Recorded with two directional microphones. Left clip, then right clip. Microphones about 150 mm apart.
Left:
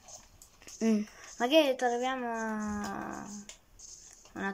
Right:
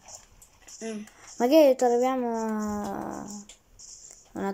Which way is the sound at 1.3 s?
25° right (ahead or behind).